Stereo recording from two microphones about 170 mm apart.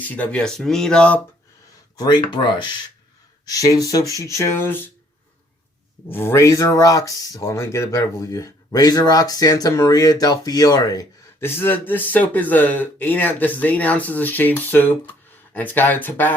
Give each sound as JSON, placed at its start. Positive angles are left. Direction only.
{"t": 0.0, "sound": "speech", "side_deg": 10}
{"t": 2.3, "sound": "speech", "side_deg": 25}
{"t": 6.1, "sound": "speech", "side_deg": 15}